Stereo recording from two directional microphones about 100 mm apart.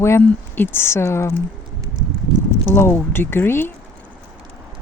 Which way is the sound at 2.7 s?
25° left (ahead or behind).